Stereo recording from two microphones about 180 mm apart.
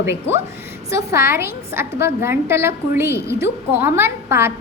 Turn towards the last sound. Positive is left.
turn(degrees=-15)  # may be behind; listen again after turning